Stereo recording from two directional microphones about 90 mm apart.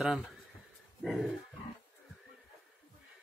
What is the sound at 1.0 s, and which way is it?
Dog, centre (ahead or behind).